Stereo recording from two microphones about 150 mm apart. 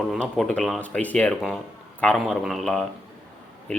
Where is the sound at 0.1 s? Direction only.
5° left (ahead or behind).